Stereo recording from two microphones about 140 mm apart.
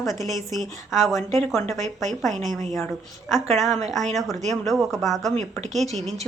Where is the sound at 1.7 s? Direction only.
55° right (ahead or behind).